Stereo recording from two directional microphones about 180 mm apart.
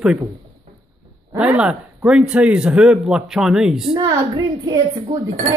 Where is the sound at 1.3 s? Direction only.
5° right (ahead or behind).